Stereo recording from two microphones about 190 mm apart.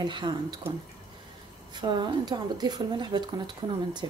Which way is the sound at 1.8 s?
25° right (ahead or behind).